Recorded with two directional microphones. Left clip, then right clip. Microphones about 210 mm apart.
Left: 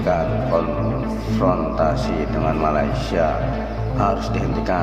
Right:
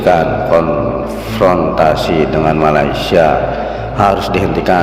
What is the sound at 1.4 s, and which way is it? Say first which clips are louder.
A man's voice: right 9 dB; 35° right (ahead or behind).